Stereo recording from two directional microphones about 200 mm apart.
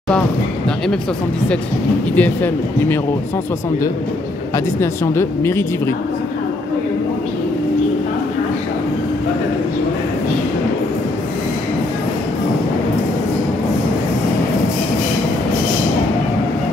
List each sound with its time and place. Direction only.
2.1 s speech: 10° left (ahead or behind)
4.7 s speech: 10° left (ahead or behind)